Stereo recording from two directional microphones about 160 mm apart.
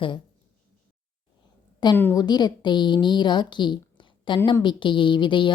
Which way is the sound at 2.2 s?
25° left (ahead or behind).